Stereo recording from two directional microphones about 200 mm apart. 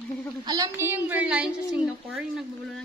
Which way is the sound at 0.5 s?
15° right (ahead or behind).